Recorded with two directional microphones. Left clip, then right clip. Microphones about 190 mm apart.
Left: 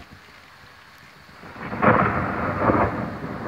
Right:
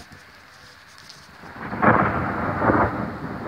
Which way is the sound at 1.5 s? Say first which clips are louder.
Even; 45° left (ahead or behind).